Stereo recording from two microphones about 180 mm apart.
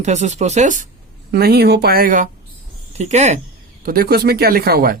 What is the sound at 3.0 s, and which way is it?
Speech, 40° right (ahead or behind).